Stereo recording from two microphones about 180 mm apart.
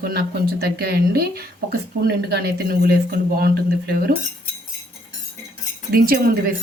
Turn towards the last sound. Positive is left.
turn(degrees=-50)  # may be behind; listen again after turning